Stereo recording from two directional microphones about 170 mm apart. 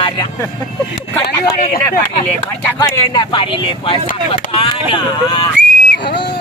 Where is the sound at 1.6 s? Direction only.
60° left (ahead or behind).